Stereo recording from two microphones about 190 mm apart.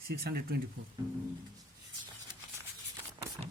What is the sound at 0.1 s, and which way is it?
Speech, 55° right (ahead or behind).